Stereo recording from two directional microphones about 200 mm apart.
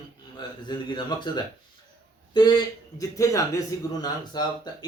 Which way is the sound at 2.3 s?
20° left (ahead or behind).